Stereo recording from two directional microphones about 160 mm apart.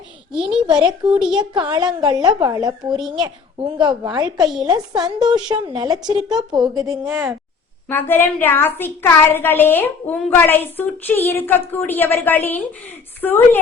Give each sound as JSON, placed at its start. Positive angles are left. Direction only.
{"t": 0.7, "sound": "a woman's voice", "side_deg": -25}
{"t": 4.4, "sound": "a woman's voice", "side_deg": -5}
{"t": 4.6, "sound": "a woman's voice", "side_deg": -25}
{"t": 7.1, "sound": "a woman's voice", "side_deg": -5}
{"t": 7.9, "sound": "a woman's voice", "side_deg": 15}